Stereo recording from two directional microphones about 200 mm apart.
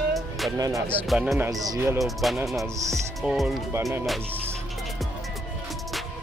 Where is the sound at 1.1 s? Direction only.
5° right (ahead or behind).